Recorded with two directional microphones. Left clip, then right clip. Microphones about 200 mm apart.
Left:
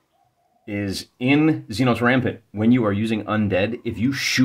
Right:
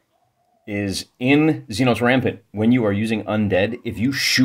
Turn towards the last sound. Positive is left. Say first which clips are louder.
# right 3 dB
turn(degrees=-10)  # may be behind; listen again after turning